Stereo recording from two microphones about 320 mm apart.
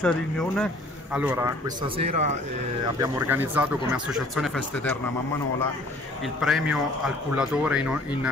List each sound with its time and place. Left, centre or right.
0.0 s a man's voice: centre
2.0 s speech: right
3.0 s speech: centre
6.2 s speech: centre